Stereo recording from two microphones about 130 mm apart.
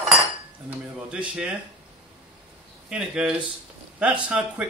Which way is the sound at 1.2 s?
5° right (ahead or behind).